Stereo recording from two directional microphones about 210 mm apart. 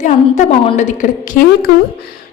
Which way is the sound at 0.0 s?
35° left (ahead or behind).